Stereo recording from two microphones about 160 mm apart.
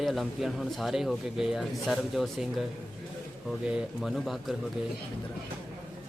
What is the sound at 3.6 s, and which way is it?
Speech, 5° right (ahead or behind).